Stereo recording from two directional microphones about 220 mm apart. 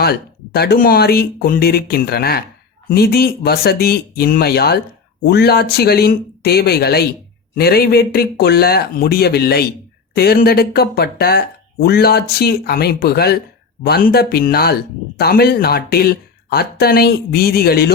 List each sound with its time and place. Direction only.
0.0 s speech: 45° left (ahead or behind)